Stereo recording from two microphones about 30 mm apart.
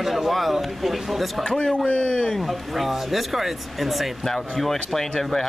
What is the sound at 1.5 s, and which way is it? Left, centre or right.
Speech, left.